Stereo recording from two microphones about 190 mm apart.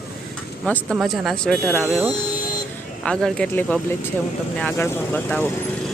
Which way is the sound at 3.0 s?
5° left (ahead or behind).